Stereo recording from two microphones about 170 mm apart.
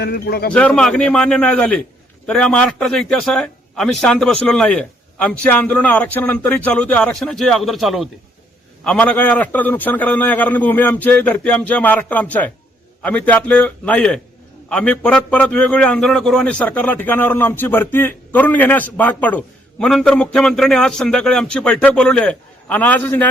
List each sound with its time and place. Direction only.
0.0 s a man's voice: 70° left (ahead or behind)
0.5 s a man's voice: 5° left (ahead or behind)